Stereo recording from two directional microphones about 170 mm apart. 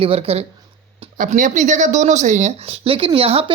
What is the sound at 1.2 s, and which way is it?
Speech, 50° right (ahead or behind).